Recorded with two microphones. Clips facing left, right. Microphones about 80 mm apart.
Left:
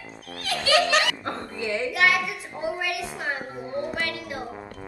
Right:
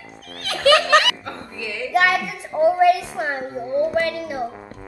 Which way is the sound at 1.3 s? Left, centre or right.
Left.